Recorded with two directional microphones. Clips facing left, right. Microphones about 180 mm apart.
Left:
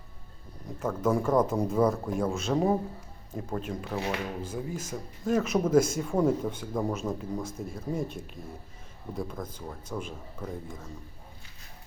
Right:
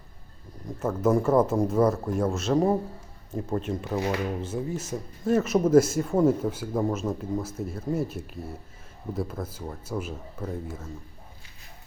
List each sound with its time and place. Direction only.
0.8 s speech: 5° right (ahead or behind)
3.9 s speech: 15° right (ahead or behind)
4.8 s speech: 5° right (ahead or behind)